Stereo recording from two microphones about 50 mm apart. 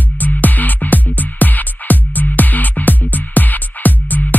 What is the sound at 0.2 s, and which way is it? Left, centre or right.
Music, left.